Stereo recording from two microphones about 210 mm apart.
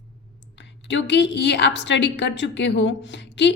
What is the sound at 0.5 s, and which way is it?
A woman's voice, 60° left (ahead or behind).